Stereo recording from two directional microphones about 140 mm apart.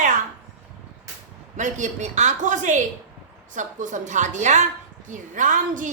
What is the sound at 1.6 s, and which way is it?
A woman's voice, 60° right (ahead or behind).